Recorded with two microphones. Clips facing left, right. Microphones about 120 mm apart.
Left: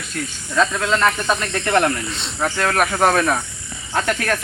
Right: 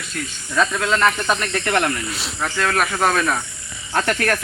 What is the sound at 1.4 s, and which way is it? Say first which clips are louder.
Speech: left 2 dB; 25° left (ahead or behind).